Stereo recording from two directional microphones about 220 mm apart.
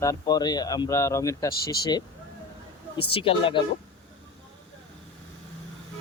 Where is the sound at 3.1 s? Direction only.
25° left (ahead or behind).